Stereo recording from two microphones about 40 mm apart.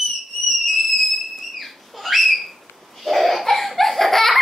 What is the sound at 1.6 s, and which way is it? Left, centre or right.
Bird, centre.